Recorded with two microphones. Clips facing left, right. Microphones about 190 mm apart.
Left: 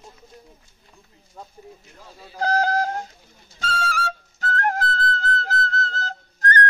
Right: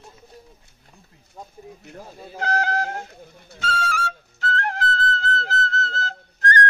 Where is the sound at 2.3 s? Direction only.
35° left (ahead or behind).